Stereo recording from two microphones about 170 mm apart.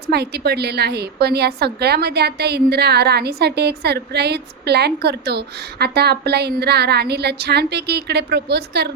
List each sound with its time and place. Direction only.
0.1 s a woman's voice: 70° right (ahead or behind)